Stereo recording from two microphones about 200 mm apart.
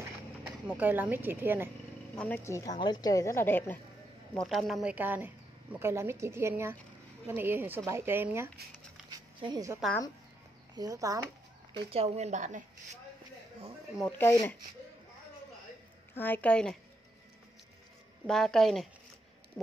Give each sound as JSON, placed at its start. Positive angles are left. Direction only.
{"t": 0.4, "sound": "speech", "side_deg": -10}
{"t": 2.1, "sound": "a woman's voice", "side_deg": 10}
{"t": 4.4, "sound": "a woman's voice", "side_deg": 0}
{"t": 11.9, "sound": "speech", "side_deg": -30}
{"t": 13.9, "sound": "a woman's voice", "side_deg": 5}
{"t": 16.2, "sound": "a woman's voice", "side_deg": 10}
{"t": 18.2, "sound": "a woman's voice", "side_deg": 0}